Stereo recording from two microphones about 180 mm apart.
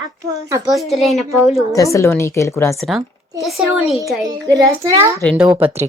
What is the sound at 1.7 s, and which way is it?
Speech, 15° left (ahead or behind).